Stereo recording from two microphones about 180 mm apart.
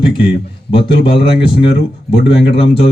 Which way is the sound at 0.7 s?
30° left (ahead or behind).